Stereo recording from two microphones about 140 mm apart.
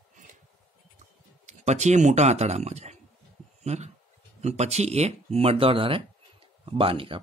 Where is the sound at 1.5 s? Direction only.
55° right (ahead or behind).